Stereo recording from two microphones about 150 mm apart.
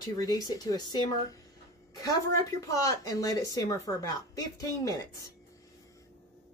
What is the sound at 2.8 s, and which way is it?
Speech, 25° left (ahead or behind).